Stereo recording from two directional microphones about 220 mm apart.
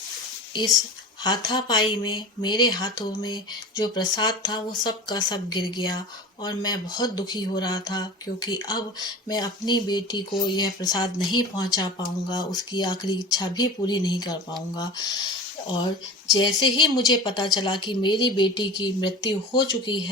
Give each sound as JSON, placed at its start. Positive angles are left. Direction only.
{"t": 0.5, "sound": "speech", "side_deg": 15}
{"t": 16.3, "sound": "speech", "side_deg": 20}